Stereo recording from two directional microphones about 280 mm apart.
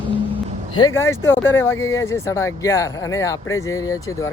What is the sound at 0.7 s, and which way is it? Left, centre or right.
Speech, centre.